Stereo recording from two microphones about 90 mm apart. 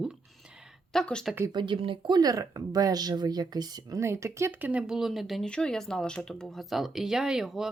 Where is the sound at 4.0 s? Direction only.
30° right (ahead or behind).